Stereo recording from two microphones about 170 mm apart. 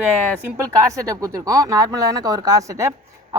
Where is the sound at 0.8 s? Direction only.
20° right (ahead or behind).